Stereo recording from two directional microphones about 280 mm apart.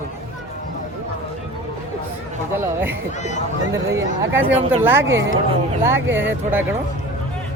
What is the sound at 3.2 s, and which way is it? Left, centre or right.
Speech, left.